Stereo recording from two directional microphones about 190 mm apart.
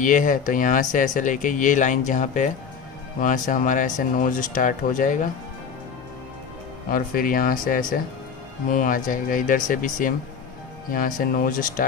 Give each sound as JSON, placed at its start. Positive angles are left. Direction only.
{"t": 0.0, "sound": "speech", "side_deg": 45}
{"t": 6.9, "sound": "speech", "side_deg": 50}